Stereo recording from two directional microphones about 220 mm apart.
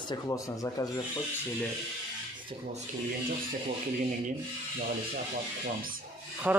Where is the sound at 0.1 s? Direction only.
15° left (ahead or behind).